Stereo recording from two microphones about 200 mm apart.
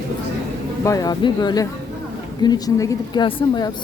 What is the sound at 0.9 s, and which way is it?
Speech, 20° left (ahead or behind).